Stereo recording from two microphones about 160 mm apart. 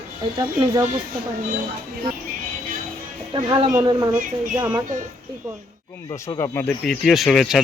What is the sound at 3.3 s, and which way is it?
Speech, 30° right (ahead or behind).